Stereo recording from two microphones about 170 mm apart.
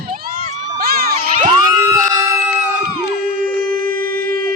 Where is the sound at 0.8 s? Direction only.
65° right (ahead or behind).